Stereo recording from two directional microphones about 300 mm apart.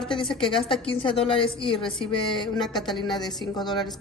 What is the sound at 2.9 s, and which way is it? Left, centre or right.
Speech, centre.